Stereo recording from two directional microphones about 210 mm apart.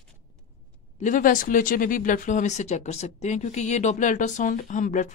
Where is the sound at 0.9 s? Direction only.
40° left (ahead or behind).